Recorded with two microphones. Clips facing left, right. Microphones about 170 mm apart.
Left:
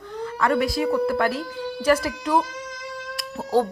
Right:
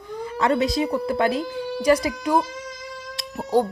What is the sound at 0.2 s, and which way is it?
A woman's voice, 20° right (ahead or behind).